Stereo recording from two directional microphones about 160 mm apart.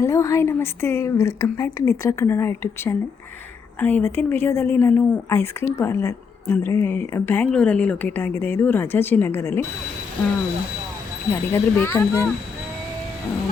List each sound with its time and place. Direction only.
0.0 s a woman's voice: 20° left (ahead or behind)
11.3 s a woman's voice: 15° left (ahead or behind)